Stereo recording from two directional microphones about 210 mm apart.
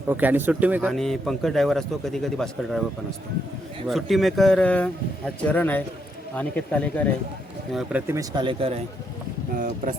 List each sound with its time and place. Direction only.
0.1 s a man's voice: 10° right (ahead or behind)
3.8 s a man's voice: centre (ahead or behind)
7.7 s a man's voice: 5° right (ahead or behind); by 8.8 s 25° right (ahead or behind)